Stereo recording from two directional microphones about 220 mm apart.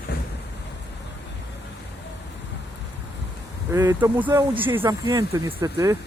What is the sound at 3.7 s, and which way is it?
Speech, 10° right (ahead or behind).